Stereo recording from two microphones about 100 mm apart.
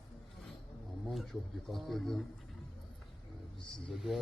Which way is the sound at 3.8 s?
Centre (ahead or behind).